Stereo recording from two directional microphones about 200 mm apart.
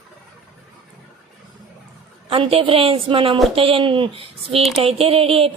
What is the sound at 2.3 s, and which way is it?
A woman's voice, 25° right (ahead or behind).